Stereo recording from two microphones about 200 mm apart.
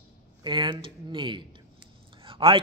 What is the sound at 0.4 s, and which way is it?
A man's voice, 25° right (ahead or behind).